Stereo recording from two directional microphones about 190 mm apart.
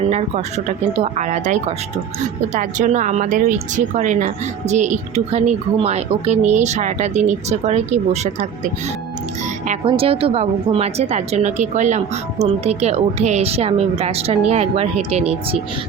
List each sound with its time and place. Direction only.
0.1 s speech: 35° right (ahead or behind)
9.8 s speech: 30° right (ahead or behind)